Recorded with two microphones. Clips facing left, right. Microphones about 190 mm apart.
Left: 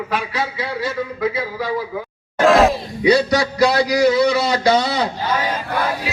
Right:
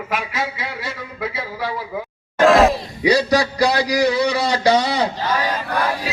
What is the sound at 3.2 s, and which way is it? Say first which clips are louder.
A man's voice: left 1 dB; 35° right (ahead or behind).